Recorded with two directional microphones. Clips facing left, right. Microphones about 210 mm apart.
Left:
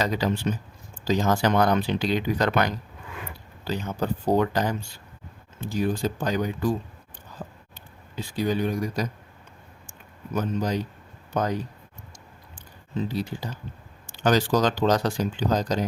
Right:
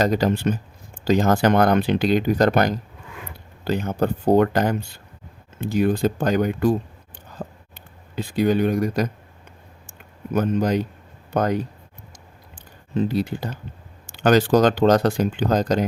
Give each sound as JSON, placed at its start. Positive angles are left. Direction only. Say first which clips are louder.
{"t": 0.0, "sound": "speech", "louder": "right 6 dB", "side_deg": -50}
{"t": 3.6, "sound": "speech", "louder": "right 6 dB", "side_deg": -55}
{"t": 7.4, "sound": "biting", "louder": "right 5 dB", "side_deg": -55}
{"t": 8.1, "sound": "speech", "louder": "right 6 dB", "side_deg": -60}
{"t": 10.3, "sound": "speech", "louder": "right 6 dB", "side_deg": -60}
{"t": 12.9, "sound": "speech", "louder": "right 6 dB", "side_deg": -60}